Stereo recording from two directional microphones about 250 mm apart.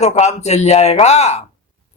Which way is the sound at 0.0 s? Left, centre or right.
Left.